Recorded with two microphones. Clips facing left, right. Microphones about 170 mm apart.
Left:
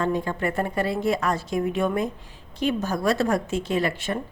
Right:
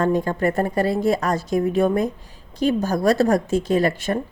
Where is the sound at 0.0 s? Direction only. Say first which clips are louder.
Right 5 dB; 45° right (ahead or behind).